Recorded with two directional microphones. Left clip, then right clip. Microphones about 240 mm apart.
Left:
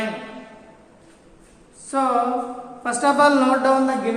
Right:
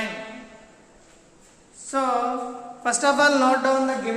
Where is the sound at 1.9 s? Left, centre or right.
Centre.